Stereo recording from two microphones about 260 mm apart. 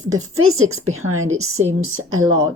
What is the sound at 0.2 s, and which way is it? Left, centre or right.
Speech, right.